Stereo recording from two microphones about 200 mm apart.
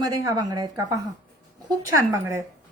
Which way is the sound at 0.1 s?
20° right (ahead or behind).